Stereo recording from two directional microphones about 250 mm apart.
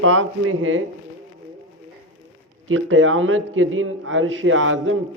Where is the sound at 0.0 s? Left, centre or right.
Right.